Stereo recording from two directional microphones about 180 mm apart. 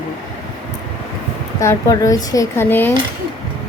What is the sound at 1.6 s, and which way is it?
Speech, 20° left (ahead or behind).